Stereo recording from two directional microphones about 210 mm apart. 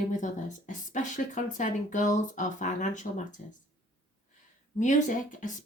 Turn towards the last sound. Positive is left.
turn(degrees=35)  # may be behind; listen again after turning